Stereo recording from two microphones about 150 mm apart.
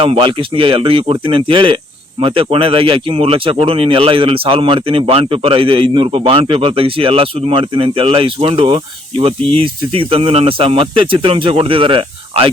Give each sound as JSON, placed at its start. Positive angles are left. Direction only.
{"t": 0.0, "sound": "speech", "side_deg": -35}